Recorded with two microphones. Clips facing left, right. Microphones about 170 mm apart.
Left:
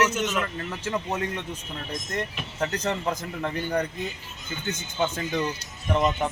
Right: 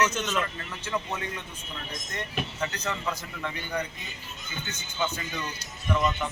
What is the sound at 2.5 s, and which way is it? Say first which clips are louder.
A man's voice: left 9 dB; 45° left (ahead or behind).